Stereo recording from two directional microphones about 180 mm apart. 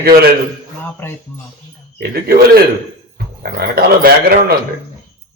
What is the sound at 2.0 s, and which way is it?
Speech, 60° right (ahead or behind).